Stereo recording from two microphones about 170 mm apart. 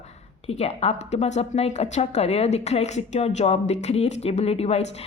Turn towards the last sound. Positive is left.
turn(degrees=35)  # may be behind; listen again after turning